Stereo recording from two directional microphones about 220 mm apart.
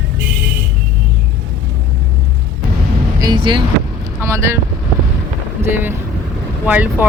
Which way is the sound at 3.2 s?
20° right (ahead or behind).